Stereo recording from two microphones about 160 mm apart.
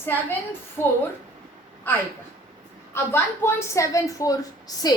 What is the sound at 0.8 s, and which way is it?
A woman's voice, 15° left (ahead or behind).